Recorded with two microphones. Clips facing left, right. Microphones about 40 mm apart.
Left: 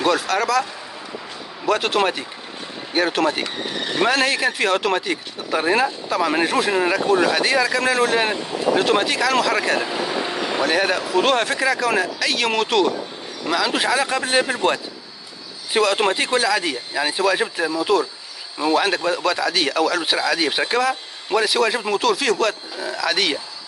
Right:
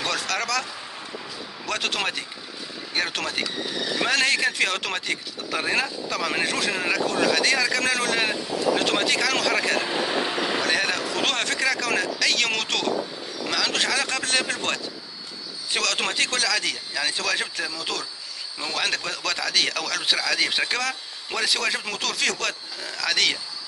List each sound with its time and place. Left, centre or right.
0.0 s speech: centre
1.7 s speech: centre
3.4 s a sound: left
4.0 s speech: centre